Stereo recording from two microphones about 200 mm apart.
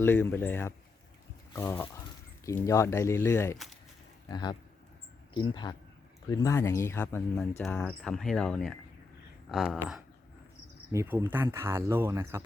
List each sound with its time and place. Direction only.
0.0 s speech: 10° left (ahead or behind)
10.9 s speech: 10° right (ahead or behind)